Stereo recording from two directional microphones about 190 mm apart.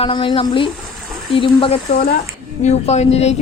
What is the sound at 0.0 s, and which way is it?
A woman's voice, 25° left (ahead or behind).